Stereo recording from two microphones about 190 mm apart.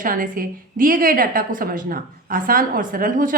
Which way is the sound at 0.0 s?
45° right (ahead or behind).